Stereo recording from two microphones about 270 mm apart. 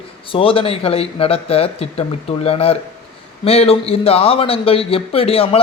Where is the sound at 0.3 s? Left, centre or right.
Centre.